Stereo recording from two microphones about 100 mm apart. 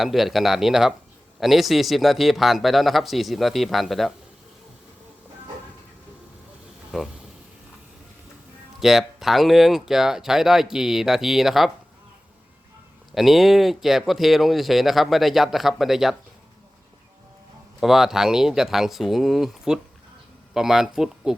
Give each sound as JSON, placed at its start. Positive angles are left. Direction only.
{"t": 0.0, "sound": "speech", "side_deg": 0}
{"t": 6.9, "sound": "speech", "side_deg": -5}
{"t": 8.8, "sound": "speech", "side_deg": -5}
{"t": 13.1, "sound": "speech", "side_deg": 0}
{"t": 17.7, "sound": "speech", "side_deg": -5}